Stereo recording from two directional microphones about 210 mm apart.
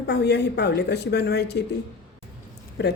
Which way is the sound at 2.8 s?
55° left (ahead or behind).